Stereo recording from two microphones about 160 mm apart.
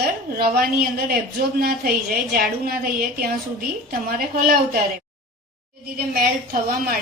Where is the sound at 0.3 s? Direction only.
70° right (ahead or behind).